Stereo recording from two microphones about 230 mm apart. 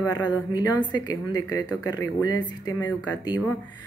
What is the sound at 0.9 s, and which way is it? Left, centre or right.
Speech, centre.